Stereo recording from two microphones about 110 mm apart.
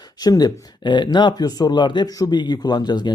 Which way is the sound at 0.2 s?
35° left (ahead or behind).